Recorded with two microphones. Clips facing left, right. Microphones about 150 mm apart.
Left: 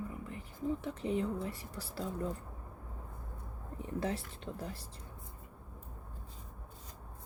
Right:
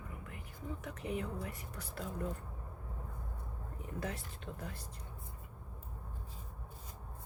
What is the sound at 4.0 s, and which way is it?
Speech, 30° left (ahead or behind).